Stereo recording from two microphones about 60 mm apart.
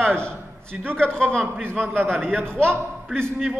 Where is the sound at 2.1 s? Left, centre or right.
Centre.